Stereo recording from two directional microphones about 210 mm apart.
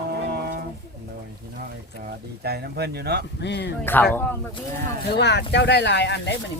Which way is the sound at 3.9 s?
10° left (ahead or behind).